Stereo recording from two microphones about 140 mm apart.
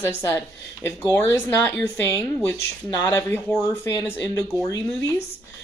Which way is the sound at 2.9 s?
20° left (ahead or behind).